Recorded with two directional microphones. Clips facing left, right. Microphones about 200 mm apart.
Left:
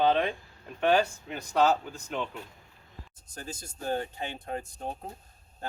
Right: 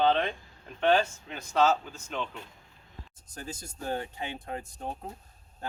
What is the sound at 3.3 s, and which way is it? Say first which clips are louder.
Speech: right 1 dB; 35° left (ahead or behind).